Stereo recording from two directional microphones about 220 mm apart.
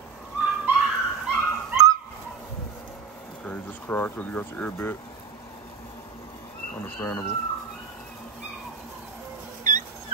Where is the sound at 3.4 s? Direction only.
5° left (ahead or behind).